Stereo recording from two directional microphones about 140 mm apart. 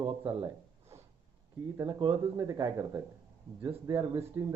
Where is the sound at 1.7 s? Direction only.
25° right (ahead or behind).